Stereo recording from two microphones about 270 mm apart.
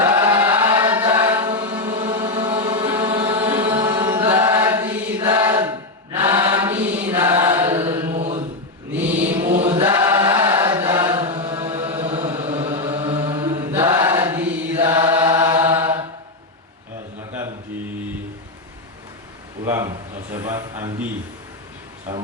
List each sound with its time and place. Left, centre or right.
0.0 s chant: centre
1.9 s chant: centre
8.0 s mantra: right
9.5 s chant: centre
11.6 s chant: centre
11.9 s chant: right
14.8 s chant: right
19.6 s a sound: centre